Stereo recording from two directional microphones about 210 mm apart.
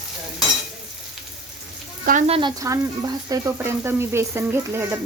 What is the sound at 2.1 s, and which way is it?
Speech, 35° right (ahead or behind).